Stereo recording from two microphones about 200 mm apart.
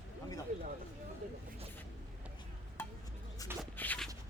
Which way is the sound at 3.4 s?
15° left (ahead or behind).